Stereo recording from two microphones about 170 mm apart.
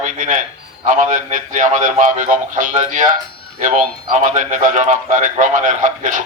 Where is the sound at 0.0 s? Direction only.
45° right (ahead or behind).